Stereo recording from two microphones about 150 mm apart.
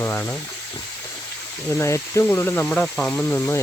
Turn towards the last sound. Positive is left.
turn(degrees=15)  # may be behind; listen again after turning